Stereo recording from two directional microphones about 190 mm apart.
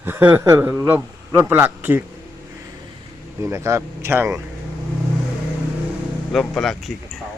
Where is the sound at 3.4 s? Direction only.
15° right (ahead or behind).